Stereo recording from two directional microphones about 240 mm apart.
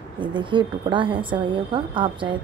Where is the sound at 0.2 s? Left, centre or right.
Centre.